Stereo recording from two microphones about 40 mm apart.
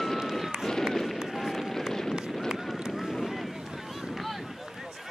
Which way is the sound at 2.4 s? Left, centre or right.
Centre.